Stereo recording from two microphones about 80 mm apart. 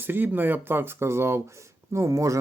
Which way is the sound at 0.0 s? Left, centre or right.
Right.